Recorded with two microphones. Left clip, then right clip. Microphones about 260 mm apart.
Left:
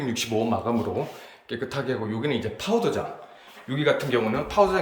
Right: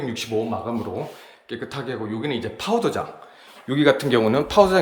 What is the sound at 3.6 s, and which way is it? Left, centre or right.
Speech, right.